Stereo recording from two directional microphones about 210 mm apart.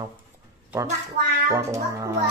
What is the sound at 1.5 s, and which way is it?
Speech, 15° right (ahead or behind).